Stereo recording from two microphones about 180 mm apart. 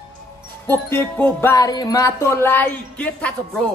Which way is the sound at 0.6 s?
10° left (ahead or behind).